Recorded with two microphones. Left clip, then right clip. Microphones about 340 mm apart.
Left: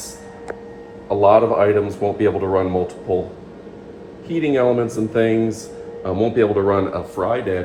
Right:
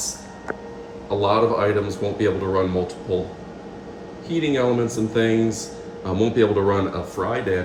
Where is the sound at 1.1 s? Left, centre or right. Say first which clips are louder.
Left 6 dB; centre.